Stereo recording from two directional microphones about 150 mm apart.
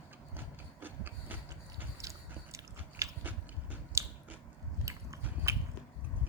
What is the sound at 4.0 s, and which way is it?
Biting, 20° right (ahead or behind).